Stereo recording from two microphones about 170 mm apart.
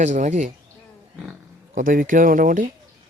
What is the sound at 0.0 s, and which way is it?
Speech, 45° right (ahead or behind).